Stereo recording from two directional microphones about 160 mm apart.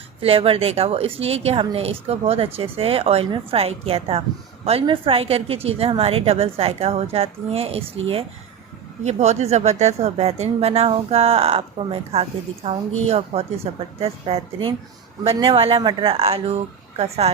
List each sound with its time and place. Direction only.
0.2 s speech: 35° right (ahead or behind)